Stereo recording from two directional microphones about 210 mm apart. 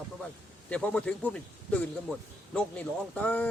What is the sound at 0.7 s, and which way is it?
Speech, 5° left (ahead or behind).